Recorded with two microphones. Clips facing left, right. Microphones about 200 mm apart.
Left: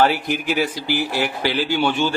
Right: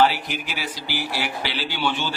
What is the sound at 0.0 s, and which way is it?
A man's voice, 50° left (ahead or behind).